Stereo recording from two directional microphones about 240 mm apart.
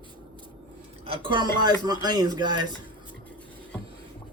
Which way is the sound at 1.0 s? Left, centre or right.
Right.